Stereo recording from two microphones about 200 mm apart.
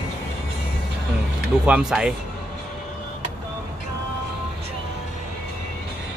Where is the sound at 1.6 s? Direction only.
5° right (ahead or behind).